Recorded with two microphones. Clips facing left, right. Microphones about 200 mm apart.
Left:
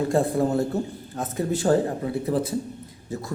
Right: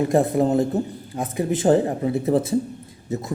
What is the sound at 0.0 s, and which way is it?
A man's voice, 20° right (ahead or behind).